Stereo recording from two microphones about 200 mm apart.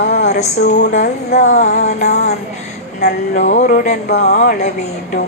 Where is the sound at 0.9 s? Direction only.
35° left (ahead or behind).